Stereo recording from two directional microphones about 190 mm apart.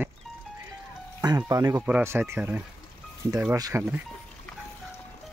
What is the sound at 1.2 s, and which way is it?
Speech, 20° right (ahead or behind).